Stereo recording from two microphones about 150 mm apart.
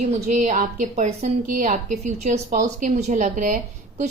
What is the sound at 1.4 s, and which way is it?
A woman's voice, 65° right (ahead or behind).